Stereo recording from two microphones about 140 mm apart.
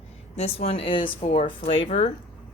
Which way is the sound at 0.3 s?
45° left (ahead or behind).